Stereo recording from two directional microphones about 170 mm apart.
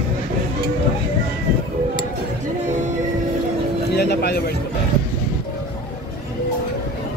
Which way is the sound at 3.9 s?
75° left (ahead or behind).